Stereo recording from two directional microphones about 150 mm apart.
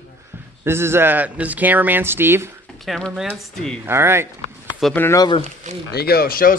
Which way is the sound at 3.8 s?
15° right (ahead or behind).